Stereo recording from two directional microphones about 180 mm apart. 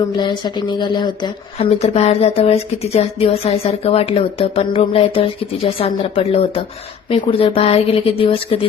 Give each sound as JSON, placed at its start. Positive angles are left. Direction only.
{"t": 0.2, "sound": "speech", "side_deg": 25}